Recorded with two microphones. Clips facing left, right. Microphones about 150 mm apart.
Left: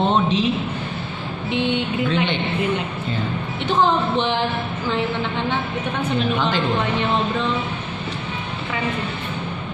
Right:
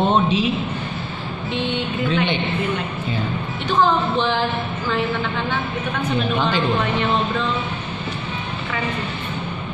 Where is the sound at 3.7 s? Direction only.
20° left (ahead or behind).